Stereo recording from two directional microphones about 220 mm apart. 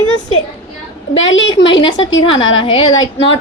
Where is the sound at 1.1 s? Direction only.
60° left (ahead or behind).